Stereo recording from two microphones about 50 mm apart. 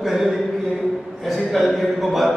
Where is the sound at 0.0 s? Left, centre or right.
Centre.